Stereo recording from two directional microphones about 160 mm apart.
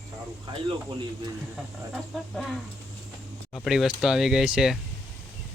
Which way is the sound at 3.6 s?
Centre (ahead or behind).